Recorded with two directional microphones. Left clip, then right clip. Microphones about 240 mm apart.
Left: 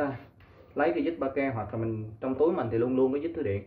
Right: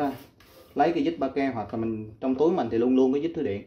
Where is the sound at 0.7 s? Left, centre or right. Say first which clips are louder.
Right 3 dB; right.